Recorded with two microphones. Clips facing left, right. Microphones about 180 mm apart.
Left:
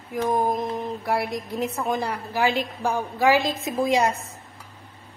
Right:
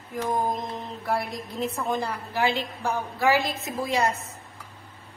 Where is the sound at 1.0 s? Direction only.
10° left (ahead or behind).